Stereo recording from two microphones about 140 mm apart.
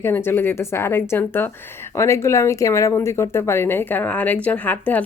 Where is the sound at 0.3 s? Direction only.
15° left (ahead or behind).